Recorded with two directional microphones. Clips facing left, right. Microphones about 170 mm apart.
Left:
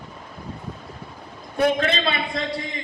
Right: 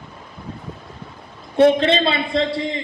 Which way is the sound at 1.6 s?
25° right (ahead or behind).